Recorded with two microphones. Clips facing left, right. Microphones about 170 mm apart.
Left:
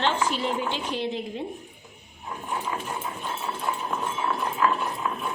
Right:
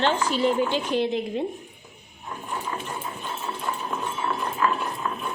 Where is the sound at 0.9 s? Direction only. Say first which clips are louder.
Right 5 dB; 55° right (ahead or behind).